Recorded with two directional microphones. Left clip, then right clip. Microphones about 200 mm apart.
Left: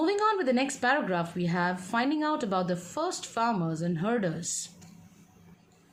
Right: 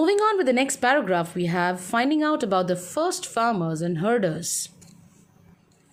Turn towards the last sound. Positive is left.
turn(degrees=-40)  # may be behind; listen again after turning